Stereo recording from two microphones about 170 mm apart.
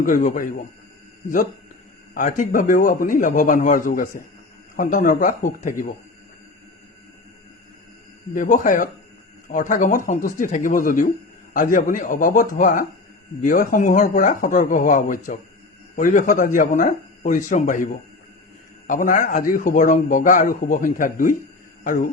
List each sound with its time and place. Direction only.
0.0 s a man's voice: 50° left (ahead or behind)
2.1 s a man's voice: 50° left (ahead or behind)
8.3 s a man's voice: 50° left (ahead or behind)